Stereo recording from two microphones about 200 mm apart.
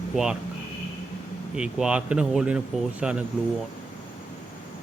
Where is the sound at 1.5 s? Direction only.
5° right (ahead or behind).